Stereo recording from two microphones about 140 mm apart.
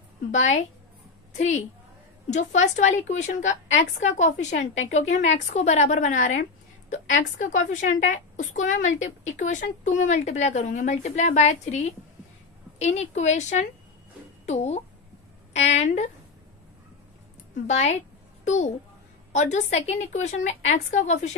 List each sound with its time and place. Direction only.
0.3 s a woman's voice: 60° left (ahead or behind)
17.6 s a woman's voice: 55° left (ahead or behind)